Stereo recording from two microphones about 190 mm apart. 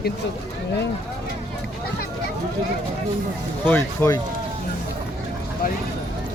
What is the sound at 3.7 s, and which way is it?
Speech, 15° left (ahead or behind).